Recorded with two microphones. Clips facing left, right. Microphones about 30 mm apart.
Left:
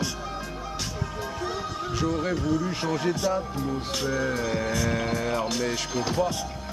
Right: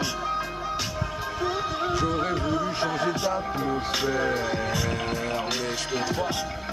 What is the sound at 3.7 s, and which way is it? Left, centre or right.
Speech, centre.